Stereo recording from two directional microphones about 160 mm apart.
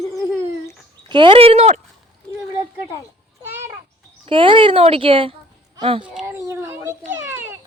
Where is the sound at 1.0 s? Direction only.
30° right (ahead or behind).